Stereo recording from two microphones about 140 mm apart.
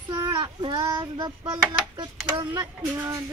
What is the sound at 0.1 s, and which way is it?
Child singing, 35° right (ahead or behind).